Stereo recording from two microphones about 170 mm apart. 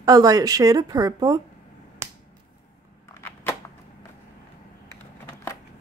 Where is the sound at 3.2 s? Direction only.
15° left (ahead or behind).